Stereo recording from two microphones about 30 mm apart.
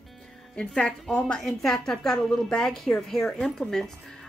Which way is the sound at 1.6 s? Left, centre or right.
Centre.